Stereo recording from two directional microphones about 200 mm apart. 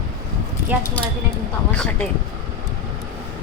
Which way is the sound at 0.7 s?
5° right (ahead or behind).